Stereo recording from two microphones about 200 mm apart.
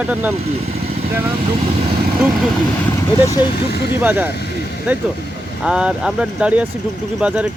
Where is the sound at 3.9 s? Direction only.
10° right (ahead or behind).